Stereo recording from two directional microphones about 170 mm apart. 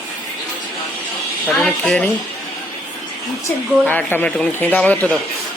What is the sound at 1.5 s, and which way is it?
Speech, 10° left (ahead or behind).